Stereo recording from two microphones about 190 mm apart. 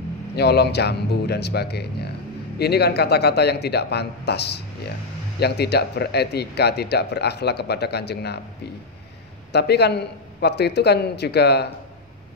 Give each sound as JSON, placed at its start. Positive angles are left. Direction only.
{"t": 0.4, "sound": "speech", "side_deg": 60}
{"t": 9.5, "sound": "speech", "side_deg": 60}